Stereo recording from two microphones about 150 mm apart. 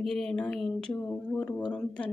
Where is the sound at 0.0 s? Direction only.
5° left (ahead or behind).